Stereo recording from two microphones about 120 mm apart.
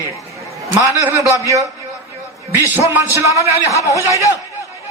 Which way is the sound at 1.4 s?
30° right (ahead or behind).